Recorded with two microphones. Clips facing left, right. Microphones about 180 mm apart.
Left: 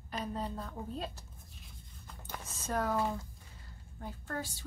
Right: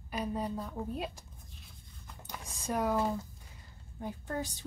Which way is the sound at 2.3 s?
15° right (ahead or behind).